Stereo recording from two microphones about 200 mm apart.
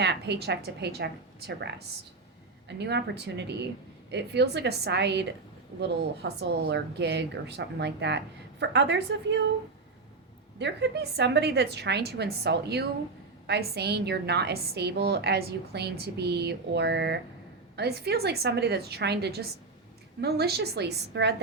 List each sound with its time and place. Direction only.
0.0 s a woman's voice: 55° right (ahead or behind)
10.6 s a woman's voice: 55° right (ahead or behind)